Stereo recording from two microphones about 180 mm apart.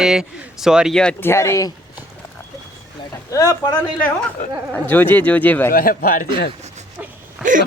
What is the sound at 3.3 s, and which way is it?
Speech, 20° left (ahead or behind).